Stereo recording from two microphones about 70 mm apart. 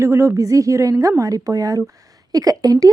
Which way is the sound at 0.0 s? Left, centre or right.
Right.